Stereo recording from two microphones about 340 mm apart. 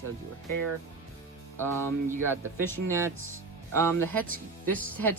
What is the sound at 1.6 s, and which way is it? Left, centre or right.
Speech, centre.